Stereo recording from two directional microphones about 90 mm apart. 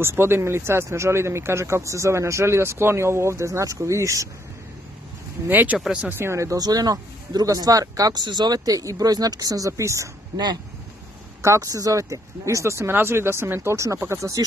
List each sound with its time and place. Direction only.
0.0 s speech: 25° right (ahead or behind)
5.5 s speech: 20° right (ahead or behind)
6.1 s speech: 30° right (ahead or behind)
11.4 s speech: 35° right (ahead or behind)